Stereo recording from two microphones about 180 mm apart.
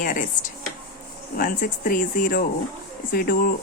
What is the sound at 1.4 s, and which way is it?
Speech, 50° left (ahead or behind).